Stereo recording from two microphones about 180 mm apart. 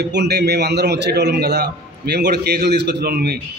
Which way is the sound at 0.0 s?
70° right (ahead or behind).